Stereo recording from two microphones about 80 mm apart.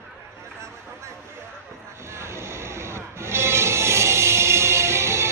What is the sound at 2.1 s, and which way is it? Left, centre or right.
Music, right.